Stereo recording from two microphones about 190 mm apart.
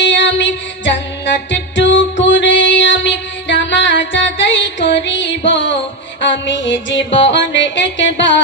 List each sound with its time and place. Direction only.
0.0 s music: 75° left (ahead or behind)
7.0 s music: 25° left (ahead or behind)
7.2 s music: 70° left (ahead or behind)